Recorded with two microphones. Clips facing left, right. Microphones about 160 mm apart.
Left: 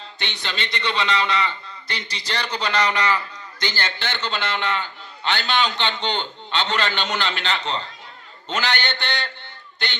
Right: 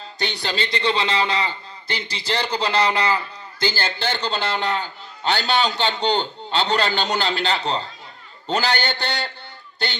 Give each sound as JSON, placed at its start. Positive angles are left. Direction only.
{"t": 0.2, "sound": "a man's voice", "side_deg": -35}